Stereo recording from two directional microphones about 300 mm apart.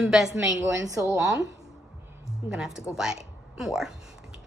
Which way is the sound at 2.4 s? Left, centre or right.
Centre.